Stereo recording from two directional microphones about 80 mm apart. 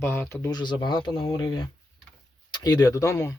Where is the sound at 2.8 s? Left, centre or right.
Left.